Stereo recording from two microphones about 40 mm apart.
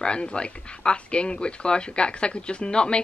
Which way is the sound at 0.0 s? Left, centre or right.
Left.